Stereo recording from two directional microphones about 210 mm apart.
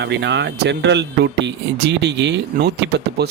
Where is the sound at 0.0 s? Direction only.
55° right (ahead or behind).